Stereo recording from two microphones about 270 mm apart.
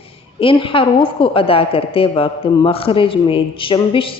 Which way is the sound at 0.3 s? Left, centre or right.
Centre.